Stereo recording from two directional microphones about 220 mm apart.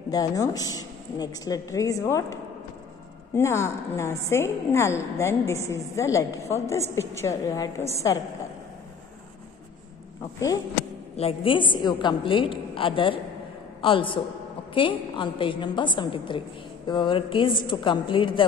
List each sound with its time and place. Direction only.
0.1 s a woman's voice: 15° left (ahead or behind)
3.3 s a woman's voice: 10° left (ahead or behind)
11.1 s a woman's voice: 25° left (ahead or behind)